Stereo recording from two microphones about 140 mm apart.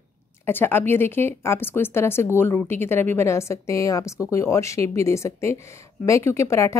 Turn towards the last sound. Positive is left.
turn(degrees=20)  # may be behind; listen again after turning